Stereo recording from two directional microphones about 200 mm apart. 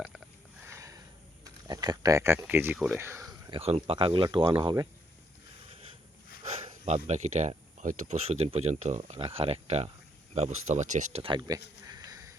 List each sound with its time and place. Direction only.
0.7 s sniff: 15° right (ahead or behind)
1.6 s speech: 20° right (ahead or behind)
3.6 s speech: 30° right (ahead or behind)
6.7 s speech: 35° right (ahead or behind)
11.9 s a sound: 20° right (ahead or behind)